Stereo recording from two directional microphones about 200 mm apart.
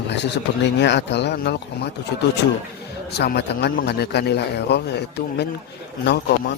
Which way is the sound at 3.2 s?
55° left (ahead or behind).